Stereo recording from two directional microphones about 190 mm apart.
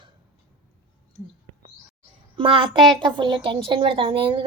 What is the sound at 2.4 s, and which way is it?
A woman's voice, 25° right (ahead or behind).